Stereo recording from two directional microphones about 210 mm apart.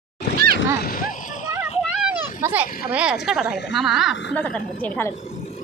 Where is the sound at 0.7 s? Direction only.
45° left (ahead or behind).